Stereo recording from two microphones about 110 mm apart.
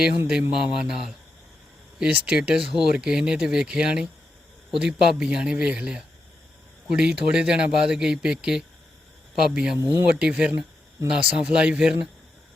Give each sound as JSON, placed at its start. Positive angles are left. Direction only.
{"t": 0.6, "sound": "speech", "side_deg": -5}
{"t": 9.7, "sound": "speech", "side_deg": -25}
{"t": 10.2, "sound": "speech", "side_deg": -5}